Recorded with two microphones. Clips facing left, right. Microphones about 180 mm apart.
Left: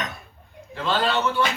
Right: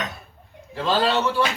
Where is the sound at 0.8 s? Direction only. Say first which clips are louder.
Right 2 dB; 35° right (ahead or behind).